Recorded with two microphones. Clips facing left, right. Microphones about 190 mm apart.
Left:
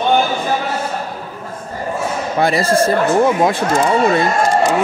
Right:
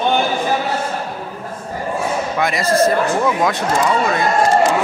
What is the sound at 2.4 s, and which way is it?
Speech, 30° left (ahead or behind).